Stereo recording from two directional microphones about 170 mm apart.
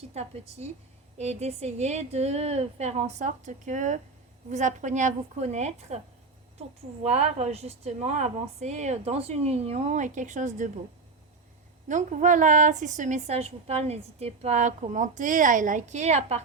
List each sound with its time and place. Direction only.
0.1 s a woman's voice: 40° right (ahead or behind)
11.9 s a woman's voice: 45° right (ahead or behind)